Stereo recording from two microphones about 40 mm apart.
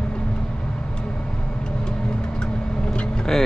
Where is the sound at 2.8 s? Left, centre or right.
Left.